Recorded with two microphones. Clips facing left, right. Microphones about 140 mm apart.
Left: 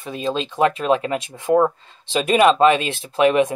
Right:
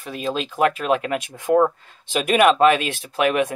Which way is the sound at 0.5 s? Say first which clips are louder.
Left 2 dB; 30° left (ahead or behind).